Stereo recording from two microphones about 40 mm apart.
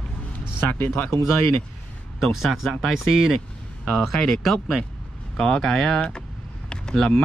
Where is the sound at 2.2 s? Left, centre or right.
Centre.